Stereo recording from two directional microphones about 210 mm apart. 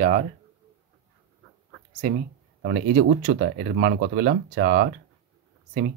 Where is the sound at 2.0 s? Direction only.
40° right (ahead or behind).